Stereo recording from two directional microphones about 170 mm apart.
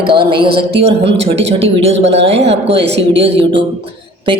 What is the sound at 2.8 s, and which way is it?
Speech, 90° right.